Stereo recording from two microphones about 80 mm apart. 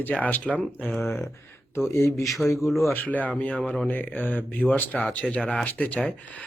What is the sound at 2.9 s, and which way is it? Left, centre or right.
Speech, left.